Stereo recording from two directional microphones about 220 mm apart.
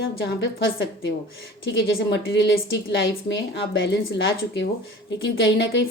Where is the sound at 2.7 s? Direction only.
55° left (ahead or behind).